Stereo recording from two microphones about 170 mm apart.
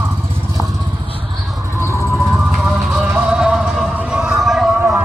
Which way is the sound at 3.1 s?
5° right (ahead or behind).